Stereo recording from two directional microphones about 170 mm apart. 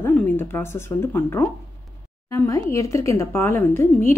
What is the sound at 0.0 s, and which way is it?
A woman's voice, 15° left (ahead or behind).